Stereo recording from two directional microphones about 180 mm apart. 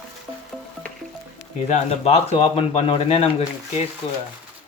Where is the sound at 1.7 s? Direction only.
35° left (ahead or behind).